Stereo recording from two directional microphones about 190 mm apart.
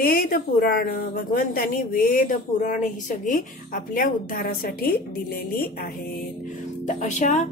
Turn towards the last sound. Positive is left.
turn(degrees=40)  # may be behind; listen again after turning